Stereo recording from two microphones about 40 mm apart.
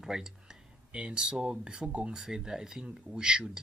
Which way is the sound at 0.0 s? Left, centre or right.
Centre.